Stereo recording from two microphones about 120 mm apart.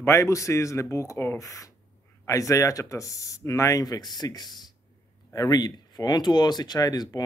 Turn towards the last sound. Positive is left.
turn(degrees=35)  # may be behind; listen again after turning